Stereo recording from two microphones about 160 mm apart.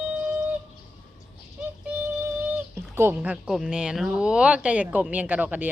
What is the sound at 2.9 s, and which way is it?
Speech, 10° right (ahead or behind).